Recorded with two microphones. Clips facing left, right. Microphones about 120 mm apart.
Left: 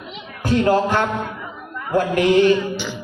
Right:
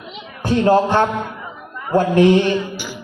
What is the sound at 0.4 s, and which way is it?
A man's voice, 25° right (ahead or behind).